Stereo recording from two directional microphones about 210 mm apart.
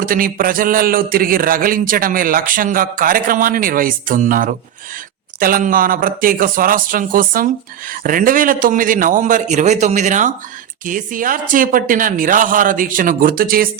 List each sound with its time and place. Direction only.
0.0 s speech: 40° right (ahead or behind)